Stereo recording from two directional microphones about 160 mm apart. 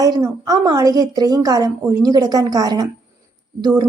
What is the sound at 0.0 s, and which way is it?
A woman's voice, 20° right (ahead or behind).